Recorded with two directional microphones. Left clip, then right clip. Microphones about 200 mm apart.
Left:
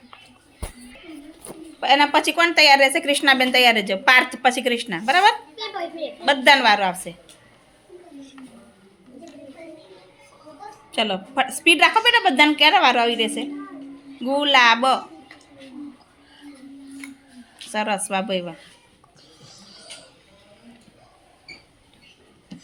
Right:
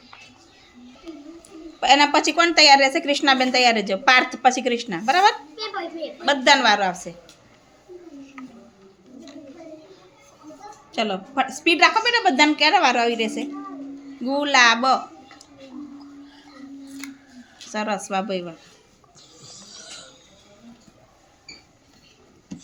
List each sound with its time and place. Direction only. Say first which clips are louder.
1.8 s a woman's voice: right 1 dB; 5° right (ahead or behind)
10.9 s a woman's voice: left 1 dB; 10° left (ahead or behind)
17.7 s speech: left 2 dB; 5° left (ahead or behind)